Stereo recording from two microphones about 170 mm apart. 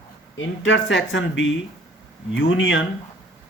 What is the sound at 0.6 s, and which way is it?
Speech, 90° left.